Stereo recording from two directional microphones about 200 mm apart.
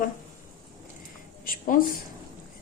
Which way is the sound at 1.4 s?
45° left (ahead or behind).